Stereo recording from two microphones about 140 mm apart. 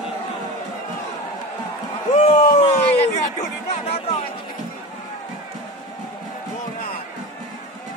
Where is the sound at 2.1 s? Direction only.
50° left (ahead or behind).